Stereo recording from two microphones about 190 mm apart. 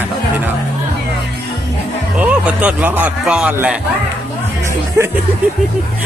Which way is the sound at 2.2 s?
5° right (ahead or behind).